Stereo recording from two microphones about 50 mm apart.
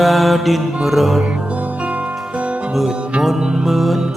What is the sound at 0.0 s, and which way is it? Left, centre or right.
Mantra, centre.